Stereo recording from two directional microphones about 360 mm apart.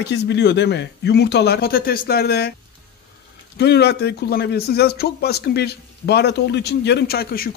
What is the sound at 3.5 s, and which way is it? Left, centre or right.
A man's voice, left.